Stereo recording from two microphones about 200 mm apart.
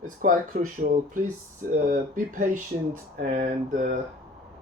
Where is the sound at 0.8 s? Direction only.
40° right (ahead or behind).